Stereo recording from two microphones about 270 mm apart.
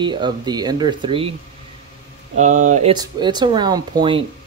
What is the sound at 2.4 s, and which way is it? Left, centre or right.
Speech, right.